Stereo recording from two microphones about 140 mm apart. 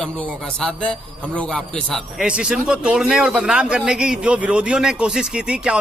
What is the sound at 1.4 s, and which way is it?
A man's voice, 5° left (ahead or behind).